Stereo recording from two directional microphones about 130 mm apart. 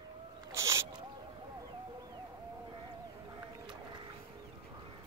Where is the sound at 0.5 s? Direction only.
25° right (ahead or behind).